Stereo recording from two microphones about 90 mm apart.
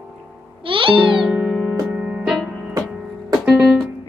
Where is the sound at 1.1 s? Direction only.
10° right (ahead or behind).